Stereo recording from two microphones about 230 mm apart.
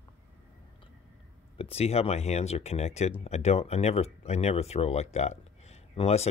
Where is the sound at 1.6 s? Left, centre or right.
Left.